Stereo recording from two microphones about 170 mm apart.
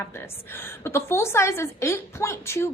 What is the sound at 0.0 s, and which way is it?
A woman's voice, 10° left (ahead or behind).